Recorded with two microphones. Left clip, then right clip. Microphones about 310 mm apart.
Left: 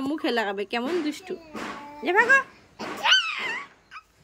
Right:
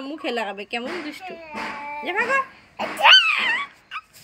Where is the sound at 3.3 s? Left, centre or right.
Centre.